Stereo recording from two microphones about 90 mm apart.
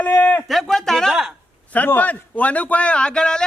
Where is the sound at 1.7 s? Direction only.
20° left (ahead or behind).